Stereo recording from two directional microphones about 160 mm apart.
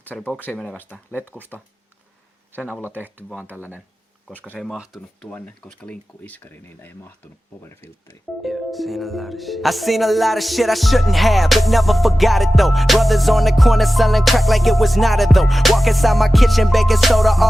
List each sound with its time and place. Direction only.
0.0 s speech: 10° left (ahead or behind)
2.5 s speech: 10° right (ahead or behind)
4.4 s speech: 10° left (ahead or behind)
8.4 s music: centre (ahead or behind)